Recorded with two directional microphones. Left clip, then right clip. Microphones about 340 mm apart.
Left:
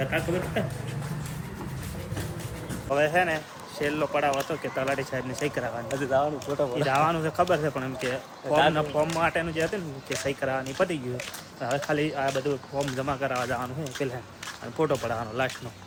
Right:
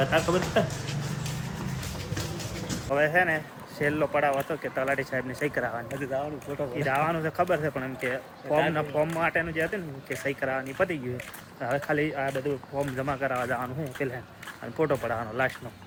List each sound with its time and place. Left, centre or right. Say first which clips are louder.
0.0 s speech: right 3 dB; centre
2.9 s speech: even; centre